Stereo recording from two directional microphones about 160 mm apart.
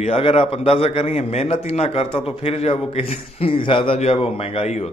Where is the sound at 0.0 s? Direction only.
40° left (ahead or behind).